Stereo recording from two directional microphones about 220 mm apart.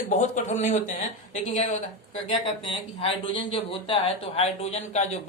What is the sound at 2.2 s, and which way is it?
A man's voice, 25° left (ahead or behind).